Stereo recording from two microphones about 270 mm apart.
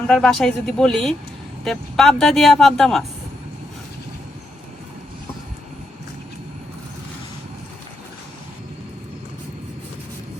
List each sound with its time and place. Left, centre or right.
0.1 s speech: centre